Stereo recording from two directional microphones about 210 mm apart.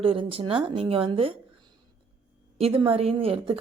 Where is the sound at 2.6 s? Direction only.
25° right (ahead or behind).